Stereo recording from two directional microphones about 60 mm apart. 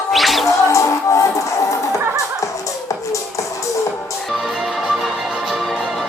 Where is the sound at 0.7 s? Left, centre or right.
Left.